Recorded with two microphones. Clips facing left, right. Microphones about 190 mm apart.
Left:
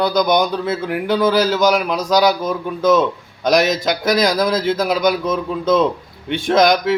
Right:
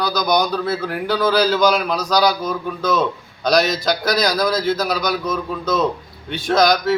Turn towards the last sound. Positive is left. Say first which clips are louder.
# left 2 dB
turn(degrees=25)  # may be behind; listen again after turning